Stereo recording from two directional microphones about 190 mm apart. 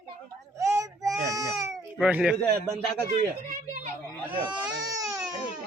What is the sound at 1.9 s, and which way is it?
Speech, 5° right (ahead or behind).